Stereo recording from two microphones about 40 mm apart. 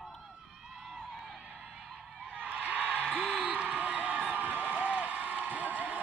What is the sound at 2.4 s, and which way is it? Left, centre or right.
Music, right.